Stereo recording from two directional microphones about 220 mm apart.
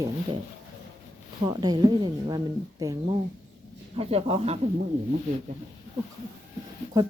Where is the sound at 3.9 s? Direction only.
25° right (ahead or behind).